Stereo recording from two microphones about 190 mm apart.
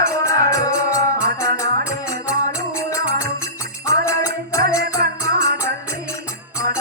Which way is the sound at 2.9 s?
15° left (ahead or behind).